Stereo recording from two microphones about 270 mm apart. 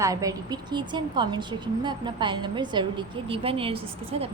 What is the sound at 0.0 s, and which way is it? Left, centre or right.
A woman's voice, centre.